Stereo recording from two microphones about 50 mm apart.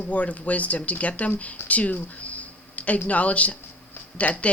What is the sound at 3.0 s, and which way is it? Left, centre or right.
A woman's voice, left.